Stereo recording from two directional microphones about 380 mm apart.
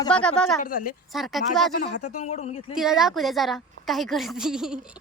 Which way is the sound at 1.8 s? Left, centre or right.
Centre.